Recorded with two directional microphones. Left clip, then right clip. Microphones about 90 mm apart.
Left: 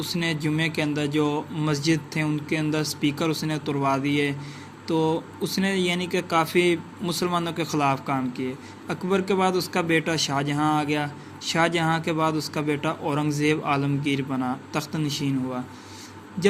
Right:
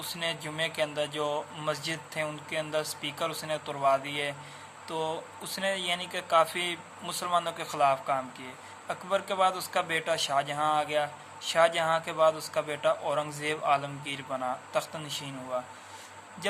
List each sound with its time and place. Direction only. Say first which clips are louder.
0.0 s speech: left 6 dB; 20° left (ahead or behind)